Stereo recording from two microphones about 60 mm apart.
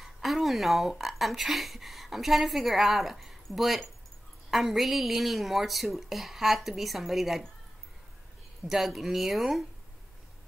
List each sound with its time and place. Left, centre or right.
0.0 s a woman's voice: centre
8.6 s a woman's voice: centre